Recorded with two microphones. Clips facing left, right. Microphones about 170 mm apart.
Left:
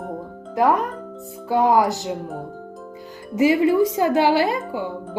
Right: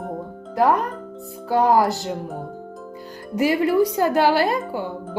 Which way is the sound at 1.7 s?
15° left (ahead or behind).